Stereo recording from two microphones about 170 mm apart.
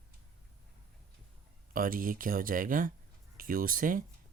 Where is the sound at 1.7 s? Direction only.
55° right (ahead or behind).